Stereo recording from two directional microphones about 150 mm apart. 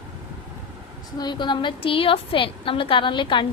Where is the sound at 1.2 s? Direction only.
30° left (ahead or behind).